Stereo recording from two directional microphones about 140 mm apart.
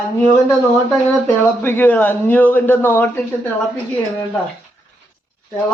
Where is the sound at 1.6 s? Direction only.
15° left (ahead or behind).